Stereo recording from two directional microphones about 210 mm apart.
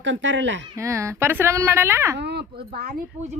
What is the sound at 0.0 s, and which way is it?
Speech, 60° right (ahead or behind).